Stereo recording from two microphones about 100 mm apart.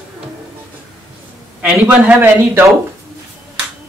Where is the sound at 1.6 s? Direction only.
10° right (ahead or behind).